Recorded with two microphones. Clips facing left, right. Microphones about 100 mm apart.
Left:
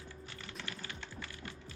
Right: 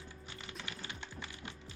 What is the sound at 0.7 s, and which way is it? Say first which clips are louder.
Music: even; 20° right (ahead or behind).